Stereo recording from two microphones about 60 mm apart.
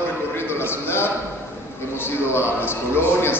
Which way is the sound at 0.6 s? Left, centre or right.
Left.